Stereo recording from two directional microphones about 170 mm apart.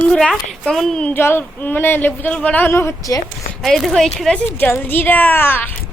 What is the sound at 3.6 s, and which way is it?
A woman's voice, centre (ahead or behind).